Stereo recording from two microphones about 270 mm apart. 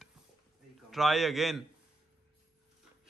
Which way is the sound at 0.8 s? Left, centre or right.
Centre.